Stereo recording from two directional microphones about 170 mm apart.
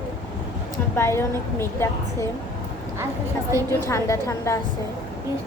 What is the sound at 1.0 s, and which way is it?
A woman's voice, 15° left (ahead or behind).